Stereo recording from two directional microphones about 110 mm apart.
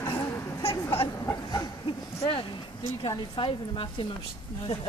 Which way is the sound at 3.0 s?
45° left (ahead or behind).